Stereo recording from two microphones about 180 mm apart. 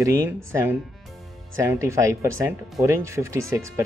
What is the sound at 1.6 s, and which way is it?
Speech, 15° right (ahead or behind).